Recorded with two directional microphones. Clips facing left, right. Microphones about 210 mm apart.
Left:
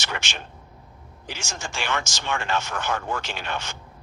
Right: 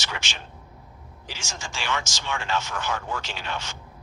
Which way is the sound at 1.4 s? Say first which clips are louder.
Left 3 dB; 55° left (ahead or behind).